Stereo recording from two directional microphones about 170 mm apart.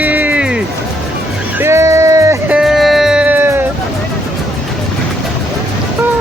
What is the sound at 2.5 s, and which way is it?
Music, centre (ahead or behind).